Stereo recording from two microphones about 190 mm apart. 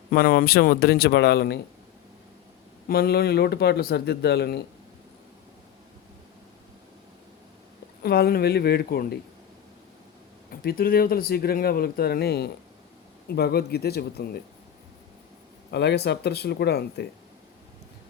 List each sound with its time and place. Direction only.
0.1 s speech: 50° left (ahead or behind)
2.8 s speech: 55° left (ahead or behind)
8.0 s speech: 55° left (ahead or behind)
10.5 s speech: 55° left (ahead or behind)
15.7 s speech: 65° left (ahead or behind)